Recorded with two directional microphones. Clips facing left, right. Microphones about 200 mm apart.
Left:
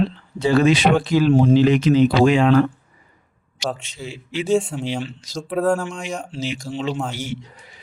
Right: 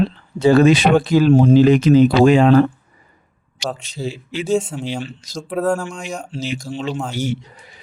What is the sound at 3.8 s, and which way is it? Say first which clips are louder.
Speech: right 7 dB; 35° right (ahead or behind).